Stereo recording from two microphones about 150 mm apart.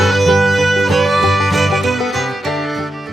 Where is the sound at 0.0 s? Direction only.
Centre (ahead or behind).